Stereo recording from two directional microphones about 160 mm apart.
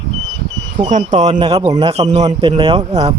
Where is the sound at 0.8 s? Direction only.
50° right (ahead or behind).